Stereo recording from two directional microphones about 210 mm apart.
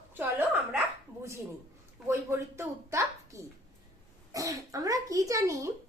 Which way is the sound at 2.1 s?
15° right (ahead or behind).